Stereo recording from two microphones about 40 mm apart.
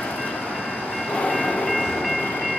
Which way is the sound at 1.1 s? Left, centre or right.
Centre.